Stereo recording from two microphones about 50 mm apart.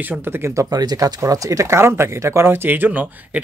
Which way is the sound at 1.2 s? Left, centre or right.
Right.